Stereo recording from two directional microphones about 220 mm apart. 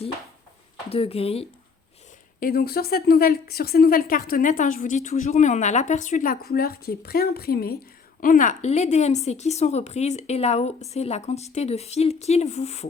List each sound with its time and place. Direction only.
0.9 s a woman's voice: 25° left (ahead or behind)
2.4 s a woman's voice: 45° left (ahead or behind)